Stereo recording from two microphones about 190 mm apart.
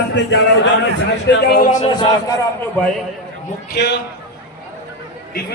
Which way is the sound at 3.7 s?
60° left (ahead or behind).